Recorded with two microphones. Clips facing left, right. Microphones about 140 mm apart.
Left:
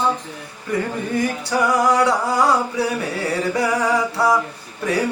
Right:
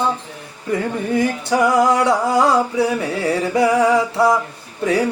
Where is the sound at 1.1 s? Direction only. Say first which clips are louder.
Right 3 dB; 25° right (ahead or behind).